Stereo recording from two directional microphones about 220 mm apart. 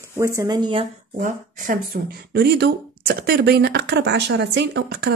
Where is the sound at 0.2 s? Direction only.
15° right (ahead or behind).